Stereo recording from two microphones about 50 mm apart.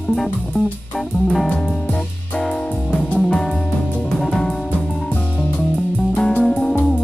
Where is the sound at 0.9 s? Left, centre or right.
Centre.